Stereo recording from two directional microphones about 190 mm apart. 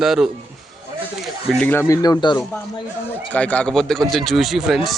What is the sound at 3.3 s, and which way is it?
Speech, 5° left (ahead or behind).